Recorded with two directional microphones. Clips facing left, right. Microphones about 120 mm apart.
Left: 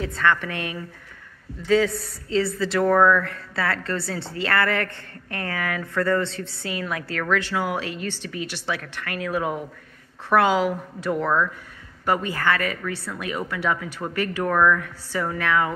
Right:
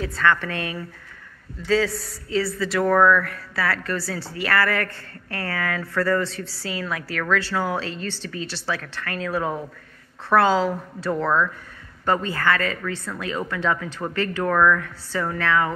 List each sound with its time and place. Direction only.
0.0 s speech: 20° left (ahead or behind)